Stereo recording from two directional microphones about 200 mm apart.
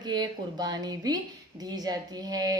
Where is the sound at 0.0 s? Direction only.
20° right (ahead or behind).